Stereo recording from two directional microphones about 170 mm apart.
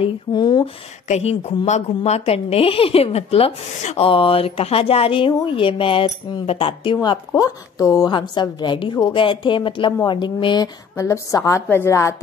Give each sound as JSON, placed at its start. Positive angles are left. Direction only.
{"t": 0.0, "sound": "a woman's voice", "side_deg": 25}
{"t": 1.0, "sound": "a woman's voice", "side_deg": 40}